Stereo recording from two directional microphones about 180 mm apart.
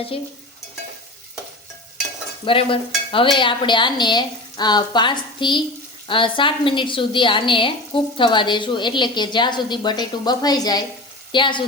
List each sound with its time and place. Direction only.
2.4 s a woman's voice: 30° left (ahead or behind)